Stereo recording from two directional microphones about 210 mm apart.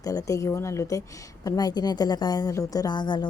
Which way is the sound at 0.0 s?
15° left (ahead or behind).